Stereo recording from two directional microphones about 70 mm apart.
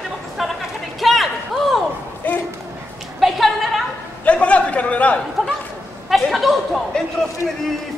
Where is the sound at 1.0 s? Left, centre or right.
Centre.